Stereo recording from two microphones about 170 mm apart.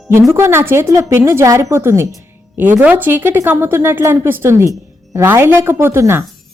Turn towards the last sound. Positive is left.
turn(degrees=-15)  # may be behind; listen again after turning